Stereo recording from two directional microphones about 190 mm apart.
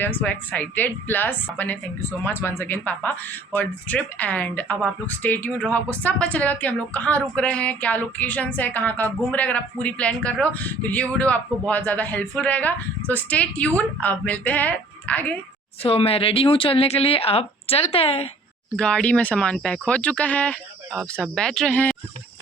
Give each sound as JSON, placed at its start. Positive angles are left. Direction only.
{"t": 0.0, "sound": "a woman's voice", "side_deg": 10}
{"t": 15.8, "sound": "speech", "side_deg": 30}
{"t": 18.8, "sound": "speech", "side_deg": 5}